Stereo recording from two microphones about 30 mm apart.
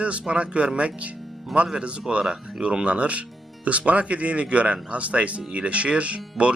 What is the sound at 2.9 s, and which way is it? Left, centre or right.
Speech, right.